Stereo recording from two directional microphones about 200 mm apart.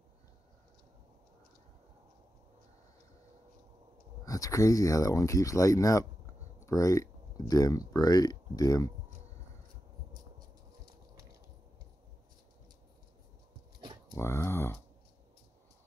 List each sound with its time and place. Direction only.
4.2 s speech: 15° left (ahead or behind)
13.7 s a sound: 20° right (ahead or behind)
14.1 s speech: 15° left (ahead or behind)